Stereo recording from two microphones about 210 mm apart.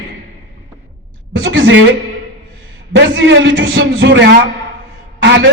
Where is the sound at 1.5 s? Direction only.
60° right (ahead or behind).